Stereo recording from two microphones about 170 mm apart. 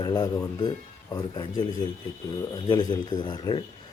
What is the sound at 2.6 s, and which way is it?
Speech, 25° left (ahead or behind).